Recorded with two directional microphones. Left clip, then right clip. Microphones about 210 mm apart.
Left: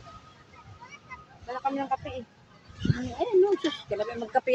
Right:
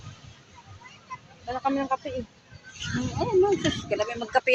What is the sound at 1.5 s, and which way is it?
Speech, 40° right (ahead or behind).